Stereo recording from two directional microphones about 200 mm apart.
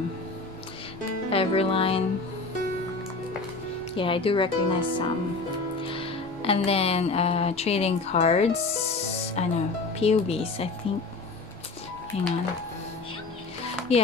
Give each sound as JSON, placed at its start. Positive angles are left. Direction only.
{"t": 1.3, "sound": "speech", "side_deg": 30}
{"t": 3.9, "sound": "speech", "side_deg": 25}
{"t": 12.1, "sound": "speech", "side_deg": 30}
{"t": 13.9, "sound": "speech", "side_deg": 30}